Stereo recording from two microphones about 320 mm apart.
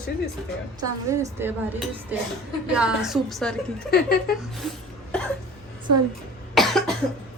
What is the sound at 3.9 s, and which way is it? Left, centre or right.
Speech, left.